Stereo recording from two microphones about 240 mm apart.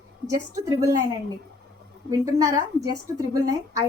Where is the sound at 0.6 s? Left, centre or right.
Centre.